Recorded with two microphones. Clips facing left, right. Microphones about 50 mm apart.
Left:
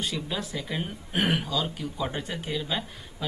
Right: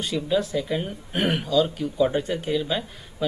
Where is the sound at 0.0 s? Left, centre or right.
Centre.